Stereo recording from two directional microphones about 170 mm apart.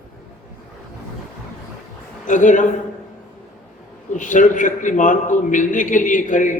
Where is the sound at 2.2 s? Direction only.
50° left (ahead or behind).